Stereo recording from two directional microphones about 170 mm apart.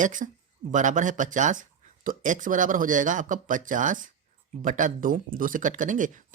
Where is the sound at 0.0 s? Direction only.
50° right (ahead or behind).